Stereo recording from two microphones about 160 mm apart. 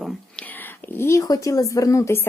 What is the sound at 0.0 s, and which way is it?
Speech, 10° left (ahead or behind).